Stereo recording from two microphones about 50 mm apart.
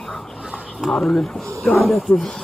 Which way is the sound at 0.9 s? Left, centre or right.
Left.